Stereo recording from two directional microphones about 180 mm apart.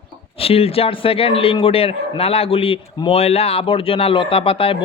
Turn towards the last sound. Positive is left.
turn(degrees=30)  # may be behind; listen again after turning